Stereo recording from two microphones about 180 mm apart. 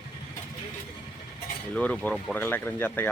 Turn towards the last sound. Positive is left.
turn(degrees=10)  # may be behind; listen again after turning